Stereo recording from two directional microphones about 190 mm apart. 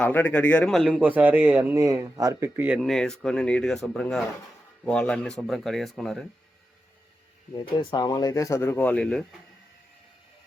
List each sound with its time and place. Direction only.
0.0 s speech: 10° left (ahead or behind); by 2.8 s 10° right (ahead or behind)
2.8 s speech: 5° left (ahead or behind)
7.5 s speech: 20° left (ahead or behind); by 9.2 s 5° left (ahead or behind)